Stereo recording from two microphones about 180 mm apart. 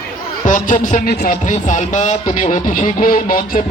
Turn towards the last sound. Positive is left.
turn(degrees=50)  # may be behind; listen again after turning